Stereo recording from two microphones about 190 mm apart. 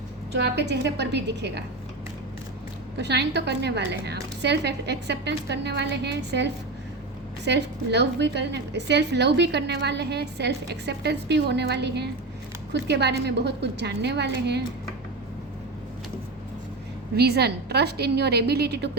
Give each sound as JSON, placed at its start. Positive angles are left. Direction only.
{"t": 0.3, "sound": "a woman's voice", "side_deg": -65}
{"t": 3.0, "sound": "a woman's voice", "side_deg": -60}
{"t": 17.2, "sound": "a woman's voice", "side_deg": -60}